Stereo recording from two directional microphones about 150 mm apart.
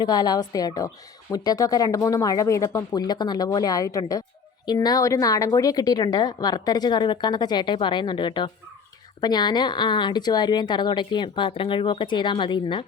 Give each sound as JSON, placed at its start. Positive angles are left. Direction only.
{"t": 0.0, "sound": "a woman's voice", "side_deg": 30}